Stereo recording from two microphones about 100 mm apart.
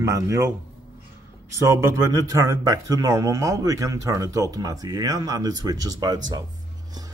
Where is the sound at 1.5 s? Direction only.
30° right (ahead or behind).